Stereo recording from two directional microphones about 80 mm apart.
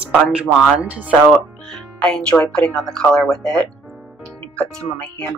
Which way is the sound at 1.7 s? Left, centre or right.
Centre.